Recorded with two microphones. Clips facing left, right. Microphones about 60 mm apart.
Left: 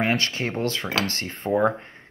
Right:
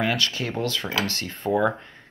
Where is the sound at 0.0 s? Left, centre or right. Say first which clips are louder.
Left 1 dB; left.